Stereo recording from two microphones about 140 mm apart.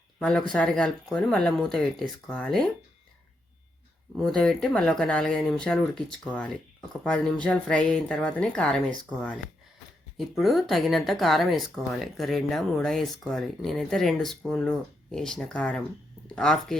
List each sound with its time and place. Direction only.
0.2 s speech: 10° left (ahead or behind)
4.1 s speech: 5° left (ahead or behind)
10.2 s speech: centre (ahead or behind)